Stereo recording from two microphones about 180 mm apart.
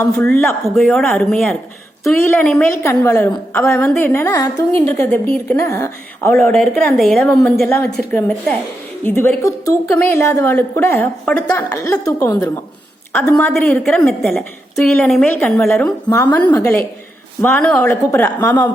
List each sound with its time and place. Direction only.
0.0 s a woman's voice: 10° left (ahead or behind)
6.5 s a woman's voice: 5° left (ahead or behind)
13.5 s a woman's voice: centre (ahead or behind)
16.0 s a woman's voice: 25° left (ahead or behind)